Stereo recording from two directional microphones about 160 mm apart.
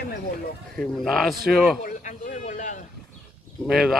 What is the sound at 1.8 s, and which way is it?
Speech, 55° left (ahead or behind).